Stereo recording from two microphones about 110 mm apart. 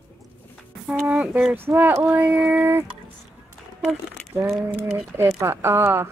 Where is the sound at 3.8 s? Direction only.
Centre (ahead or behind).